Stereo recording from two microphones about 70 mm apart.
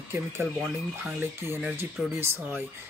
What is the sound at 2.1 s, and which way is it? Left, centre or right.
Speech, right.